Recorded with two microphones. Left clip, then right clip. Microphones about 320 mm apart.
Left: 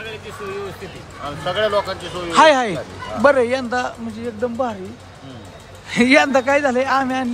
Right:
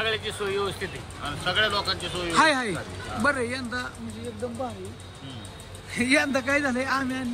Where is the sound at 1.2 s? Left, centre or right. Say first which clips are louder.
Left 4 dB; centre.